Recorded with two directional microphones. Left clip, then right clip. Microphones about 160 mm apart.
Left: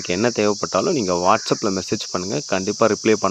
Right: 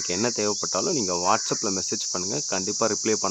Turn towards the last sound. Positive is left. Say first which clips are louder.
# left 7 dB
turn(degrees=35)  # may be behind; listen again after turning